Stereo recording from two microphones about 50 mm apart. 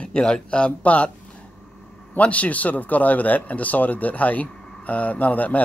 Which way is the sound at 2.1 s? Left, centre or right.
Left.